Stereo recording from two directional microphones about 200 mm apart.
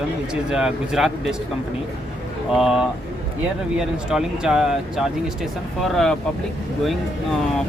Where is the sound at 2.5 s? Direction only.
Centre (ahead or behind).